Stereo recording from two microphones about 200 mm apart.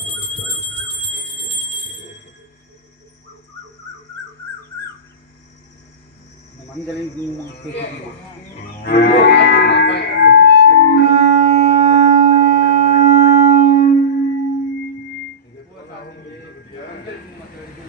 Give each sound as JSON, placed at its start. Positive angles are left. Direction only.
{"t": 8.8, "sound": "livestock", "side_deg": 55}